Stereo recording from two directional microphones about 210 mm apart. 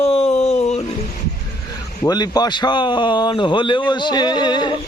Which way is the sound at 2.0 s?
20° left (ahead or behind).